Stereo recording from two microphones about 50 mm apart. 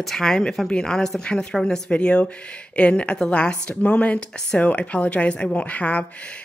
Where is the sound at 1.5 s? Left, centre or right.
Centre.